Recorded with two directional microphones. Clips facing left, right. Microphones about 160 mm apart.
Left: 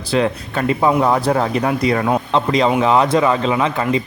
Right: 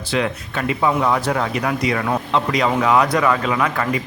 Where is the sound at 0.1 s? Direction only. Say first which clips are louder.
Left 4 dB; 35° left (ahead or behind).